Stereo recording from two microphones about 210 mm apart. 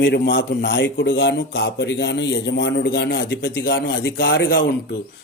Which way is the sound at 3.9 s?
45° left (ahead or behind).